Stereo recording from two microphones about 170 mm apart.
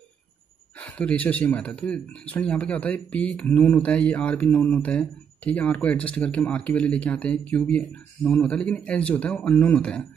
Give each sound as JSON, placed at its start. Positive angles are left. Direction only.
{"t": 0.7, "sound": "speech", "side_deg": 5}